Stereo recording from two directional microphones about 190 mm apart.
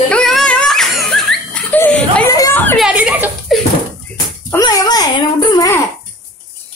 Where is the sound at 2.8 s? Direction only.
5° right (ahead or behind).